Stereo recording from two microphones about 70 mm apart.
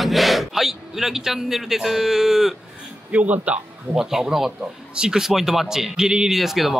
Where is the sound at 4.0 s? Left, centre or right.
Centre.